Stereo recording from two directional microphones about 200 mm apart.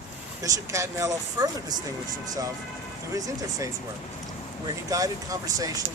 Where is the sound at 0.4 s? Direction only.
15° right (ahead or behind).